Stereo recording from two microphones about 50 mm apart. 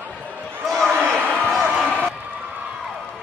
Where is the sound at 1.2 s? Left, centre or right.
Right.